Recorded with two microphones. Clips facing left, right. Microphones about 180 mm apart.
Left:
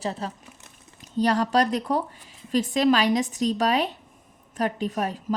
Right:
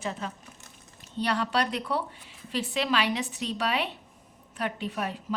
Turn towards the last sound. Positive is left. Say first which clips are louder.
# left 5 dB
turn(degrees=40)  # may be behind; listen again after turning